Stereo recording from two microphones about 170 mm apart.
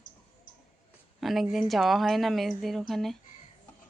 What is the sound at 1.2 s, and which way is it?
Speech, centre (ahead or behind).